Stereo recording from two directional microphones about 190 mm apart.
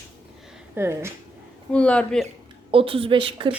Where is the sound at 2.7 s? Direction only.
30° right (ahead or behind).